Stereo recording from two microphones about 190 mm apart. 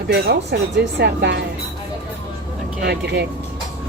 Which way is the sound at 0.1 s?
60° right (ahead or behind).